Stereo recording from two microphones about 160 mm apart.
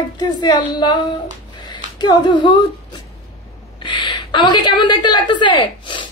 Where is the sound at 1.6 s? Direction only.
25° left (ahead or behind).